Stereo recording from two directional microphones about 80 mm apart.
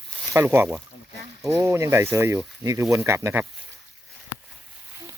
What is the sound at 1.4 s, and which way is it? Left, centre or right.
Speech, right.